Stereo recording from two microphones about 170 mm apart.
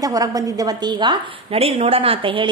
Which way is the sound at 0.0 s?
20° right (ahead or behind).